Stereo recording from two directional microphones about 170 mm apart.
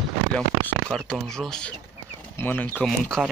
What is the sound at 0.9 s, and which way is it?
Speech, 5° left (ahead or behind).